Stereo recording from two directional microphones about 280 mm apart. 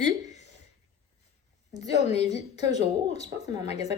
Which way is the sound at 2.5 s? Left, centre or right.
Left.